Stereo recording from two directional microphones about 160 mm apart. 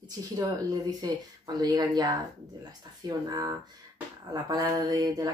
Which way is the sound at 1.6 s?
25° right (ahead or behind).